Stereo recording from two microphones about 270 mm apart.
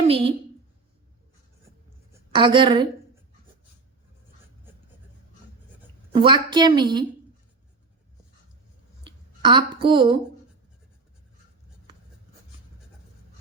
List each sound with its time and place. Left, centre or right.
0.0 s a woman's voice: right
2.3 s a woman's voice: centre
6.1 s a woman's voice: centre
9.0 s a woman's voice: centre